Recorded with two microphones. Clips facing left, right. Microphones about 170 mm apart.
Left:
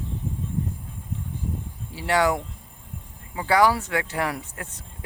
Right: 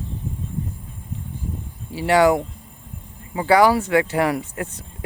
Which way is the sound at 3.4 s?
70° right (ahead or behind).